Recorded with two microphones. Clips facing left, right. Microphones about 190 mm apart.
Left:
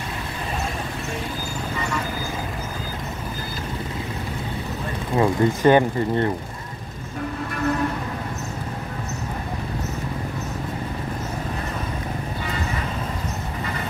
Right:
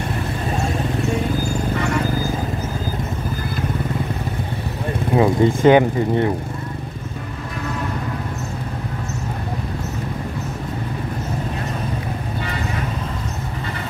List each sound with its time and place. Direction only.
5.1 s speech: 15° right (ahead or behind)